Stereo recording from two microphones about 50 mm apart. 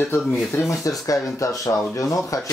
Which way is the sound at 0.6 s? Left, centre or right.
Left.